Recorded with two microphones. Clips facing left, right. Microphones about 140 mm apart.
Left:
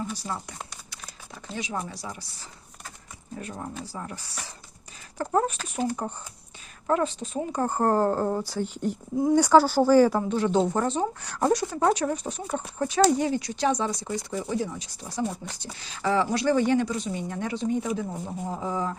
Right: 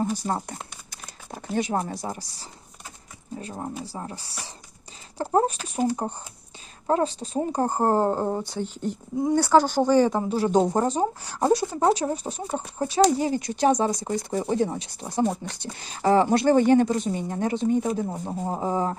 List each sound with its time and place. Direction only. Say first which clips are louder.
0.0 s crumpling: right 6 dB; 45° right (ahead or behind)
1.5 s speech: right 7 dB; 50° right (ahead or behind)
3.3 s speech: right 3 dB; 30° right (ahead or behind)
8.6 s speech: left 1 dB; 10° left (ahead or behind)
9.8 s speech: left 1 dB; 15° right (ahead or behind)
10.3 s speech: right 2 dB; 35° right (ahead or behind)
13.4 s speech: right 4 dB; 45° right (ahead or behind)
15.8 s speech: right 5 dB; 45° right (ahead or behind)